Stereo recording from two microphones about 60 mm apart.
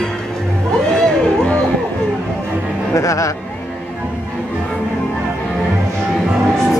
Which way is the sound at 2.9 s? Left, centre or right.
Left.